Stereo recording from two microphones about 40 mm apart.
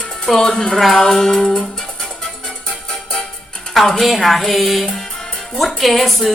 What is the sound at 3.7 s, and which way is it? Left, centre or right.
A woman's voice, centre.